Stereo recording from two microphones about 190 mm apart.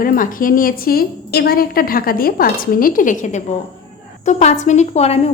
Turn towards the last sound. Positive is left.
turn(degrees=35)  # may be behind; listen again after turning